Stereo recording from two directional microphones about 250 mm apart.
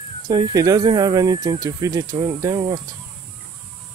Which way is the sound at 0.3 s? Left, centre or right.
Centre.